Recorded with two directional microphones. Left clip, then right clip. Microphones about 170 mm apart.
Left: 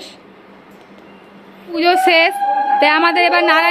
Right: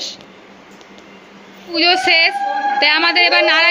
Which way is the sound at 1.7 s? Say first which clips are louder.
Left 1 dB; 20° left (ahead or behind).